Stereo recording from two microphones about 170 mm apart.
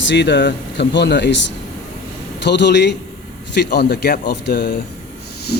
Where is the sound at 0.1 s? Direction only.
90° left.